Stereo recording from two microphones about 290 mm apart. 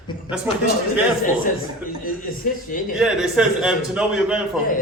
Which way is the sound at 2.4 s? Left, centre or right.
Left.